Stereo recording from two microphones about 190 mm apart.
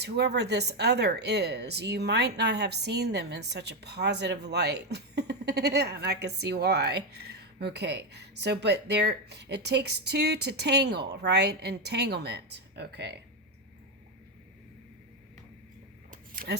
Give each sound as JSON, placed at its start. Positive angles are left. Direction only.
{"t": 0.0, "sound": "a woman's voice", "side_deg": -60}
{"t": 16.3, "sound": "scissors", "side_deg": -60}